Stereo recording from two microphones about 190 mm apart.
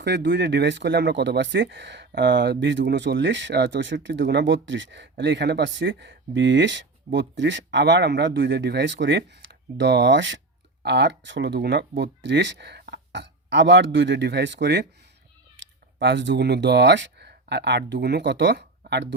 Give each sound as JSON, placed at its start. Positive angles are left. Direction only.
{"t": 0.0, "sound": "speech", "side_deg": -65}